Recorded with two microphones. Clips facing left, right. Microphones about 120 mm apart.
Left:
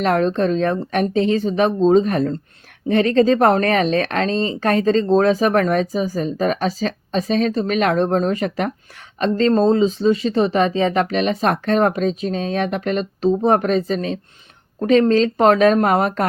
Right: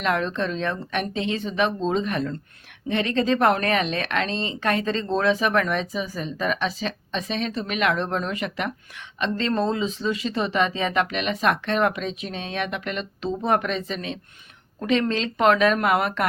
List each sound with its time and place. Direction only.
0.0 s speech: 40° left (ahead or behind)